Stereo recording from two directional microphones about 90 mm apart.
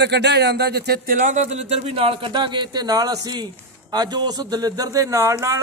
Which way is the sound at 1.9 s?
90° right.